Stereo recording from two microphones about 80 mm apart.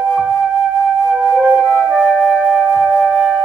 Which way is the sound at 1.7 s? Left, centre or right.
Centre.